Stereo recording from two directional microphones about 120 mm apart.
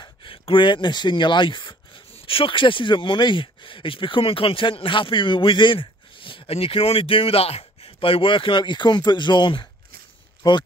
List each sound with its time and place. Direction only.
0.0 s speech: 45° left (ahead or behind)